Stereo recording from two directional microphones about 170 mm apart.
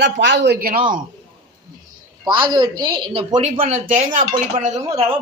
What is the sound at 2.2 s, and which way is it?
Speech, 25° right (ahead or behind).